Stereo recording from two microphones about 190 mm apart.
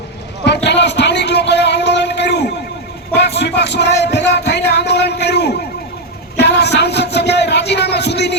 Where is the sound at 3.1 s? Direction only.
60° left (ahead or behind).